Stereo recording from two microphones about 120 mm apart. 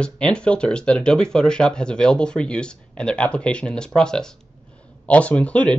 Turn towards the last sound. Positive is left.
turn(degrees=10)  # may be behind; listen again after turning